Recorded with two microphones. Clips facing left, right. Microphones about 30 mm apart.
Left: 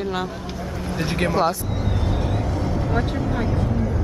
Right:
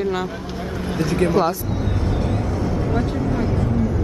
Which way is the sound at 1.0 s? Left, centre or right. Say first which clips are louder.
Right 4 dB; left.